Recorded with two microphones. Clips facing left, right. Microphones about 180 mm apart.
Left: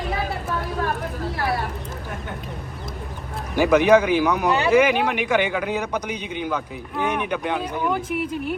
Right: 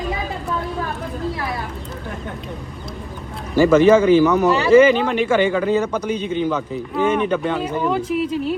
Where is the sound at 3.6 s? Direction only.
15° left (ahead or behind).